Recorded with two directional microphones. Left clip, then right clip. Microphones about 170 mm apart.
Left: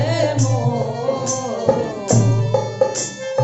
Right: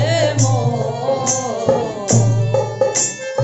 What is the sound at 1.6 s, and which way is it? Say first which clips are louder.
Music: even; 20° right (ahead or behind).